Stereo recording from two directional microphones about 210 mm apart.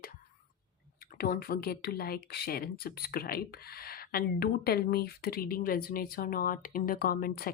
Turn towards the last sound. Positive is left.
turn(degrees=45)  # may be behind; listen again after turning